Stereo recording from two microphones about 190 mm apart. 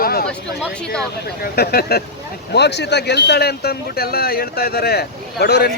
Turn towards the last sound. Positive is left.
turn(degrees=60)  # may be behind; listen again after turning